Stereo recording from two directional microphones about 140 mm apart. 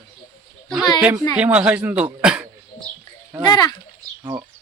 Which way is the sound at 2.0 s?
5° right (ahead or behind).